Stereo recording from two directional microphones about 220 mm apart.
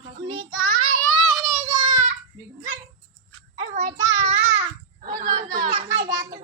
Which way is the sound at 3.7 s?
35° right (ahead or behind).